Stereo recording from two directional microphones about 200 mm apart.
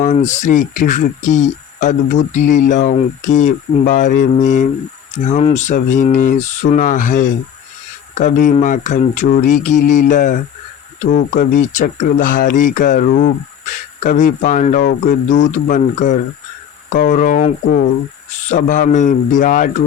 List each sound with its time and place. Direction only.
0.0 s speech: 35° left (ahead or behind)